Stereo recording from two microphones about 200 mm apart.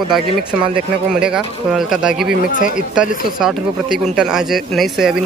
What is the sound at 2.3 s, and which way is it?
Speech, 40° left (ahead or behind).